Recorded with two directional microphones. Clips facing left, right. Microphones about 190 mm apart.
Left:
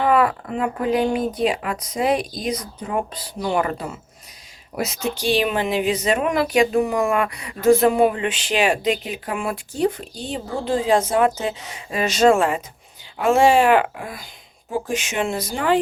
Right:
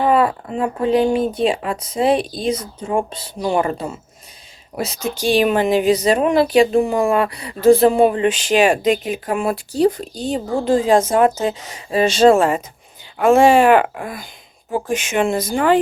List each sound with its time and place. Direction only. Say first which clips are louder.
0.0 s speech: right 2 dB; 25° right (ahead or behind)
5.1 s speech: right 6 dB; 45° right (ahead or behind)
13.2 s speech: right 4 dB; 50° right (ahead or behind)